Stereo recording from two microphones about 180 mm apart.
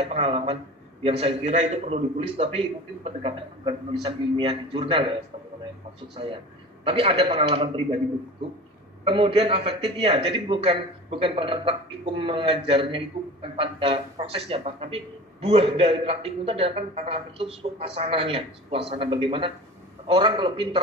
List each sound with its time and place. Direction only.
0.0 s a man's voice: 35° right (ahead or behind)
9.0 s a man's voice: 30° right (ahead or behind)